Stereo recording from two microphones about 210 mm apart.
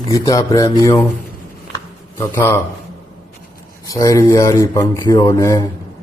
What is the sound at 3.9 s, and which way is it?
Speech, 15° left (ahead or behind).